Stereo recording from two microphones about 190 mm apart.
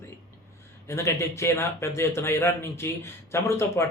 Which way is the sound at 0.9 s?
15° left (ahead or behind).